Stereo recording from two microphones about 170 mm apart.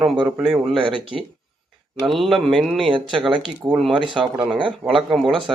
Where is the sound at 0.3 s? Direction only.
5° right (ahead or behind).